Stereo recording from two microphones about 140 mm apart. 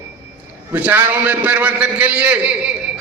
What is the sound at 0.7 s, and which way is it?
A man's voice, 10° right (ahead or behind).